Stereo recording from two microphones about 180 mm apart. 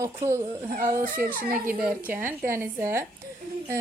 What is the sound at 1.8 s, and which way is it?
Speech, 10° right (ahead or behind).